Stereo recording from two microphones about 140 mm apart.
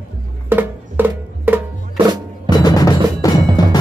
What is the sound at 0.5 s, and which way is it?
Music, 15° right (ahead or behind).